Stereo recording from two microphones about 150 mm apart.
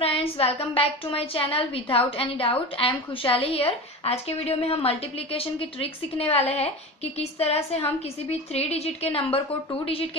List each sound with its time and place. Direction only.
0.0 s a woman's voice: 40° left (ahead or behind)